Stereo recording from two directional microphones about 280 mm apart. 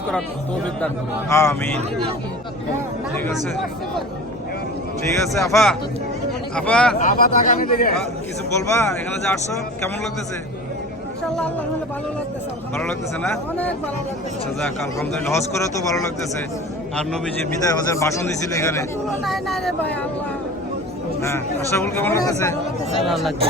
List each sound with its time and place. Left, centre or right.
1.3 s a man's voice: centre
3.2 s speech: centre
5.4 s speech: centre
7.0 s speech: left
8.7 s a man's voice: centre
12.7 s a man's voice: centre
21.2 s a man's voice: centre
22.9 s speech: centre